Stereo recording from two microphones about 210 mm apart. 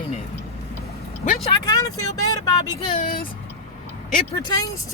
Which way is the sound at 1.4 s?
20° left (ahead or behind).